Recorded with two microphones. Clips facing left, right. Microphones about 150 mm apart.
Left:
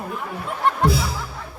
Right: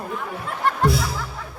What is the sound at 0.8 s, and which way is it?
Music, centre (ahead or behind).